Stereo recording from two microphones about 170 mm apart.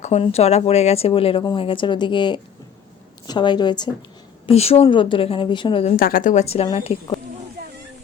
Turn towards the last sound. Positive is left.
turn(degrees=35)  # may be behind; listen again after turning